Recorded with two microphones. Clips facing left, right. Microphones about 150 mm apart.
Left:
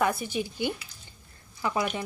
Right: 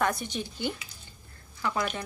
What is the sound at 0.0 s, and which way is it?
Speech, 5° left (ahead or behind).